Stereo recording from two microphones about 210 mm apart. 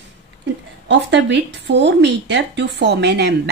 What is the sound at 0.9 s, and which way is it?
Speech, 55° right (ahead or behind).